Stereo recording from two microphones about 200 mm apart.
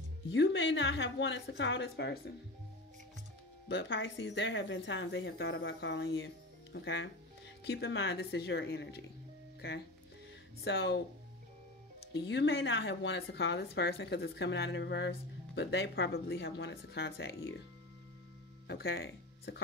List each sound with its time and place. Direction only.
0.3 s speech: 65° left (ahead or behind)
3.6 s speech: 65° left (ahead or behind)
10.6 s speech: 55° left (ahead or behind)
12.1 s speech: 65° left (ahead or behind)
18.7 s speech: 55° left (ahead or behind)